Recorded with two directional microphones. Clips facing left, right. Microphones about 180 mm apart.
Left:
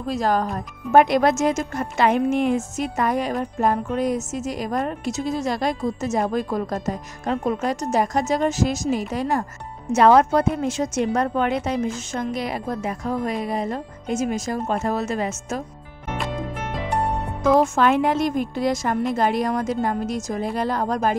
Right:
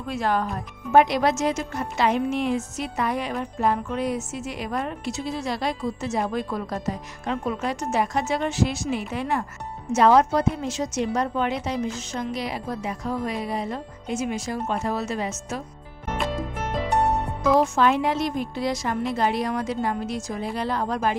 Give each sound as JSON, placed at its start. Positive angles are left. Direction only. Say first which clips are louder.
{"t": 0.0, "sound": "speech", "louder": "left 3 dB", "side_deg": 40}
{"t": 9.9, "sound": "speech", "louder": "left 3 dB", "side_deg": 60}
{"t": 17.6, "sound": "speech", "louder": "left 2 dB", "side_deg": 55}